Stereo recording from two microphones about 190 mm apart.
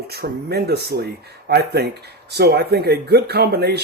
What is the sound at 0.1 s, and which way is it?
Speech, 55° right (ahead or behind).